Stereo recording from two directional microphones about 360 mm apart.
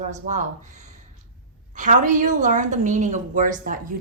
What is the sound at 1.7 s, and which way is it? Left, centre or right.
A woman's voice, right.